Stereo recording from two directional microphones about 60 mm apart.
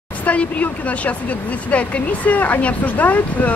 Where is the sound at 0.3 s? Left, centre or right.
Left.